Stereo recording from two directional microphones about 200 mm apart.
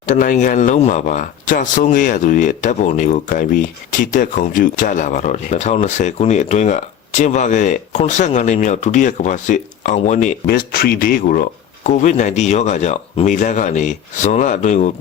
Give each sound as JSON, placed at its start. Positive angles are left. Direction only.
{"t": 0.0, "sound": "speech", "side_deg": 40}